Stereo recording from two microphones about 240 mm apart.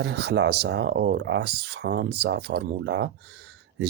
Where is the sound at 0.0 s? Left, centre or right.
Right.